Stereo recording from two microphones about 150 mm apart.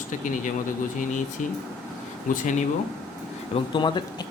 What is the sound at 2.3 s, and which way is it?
Speech, 60° left (ahead or behind).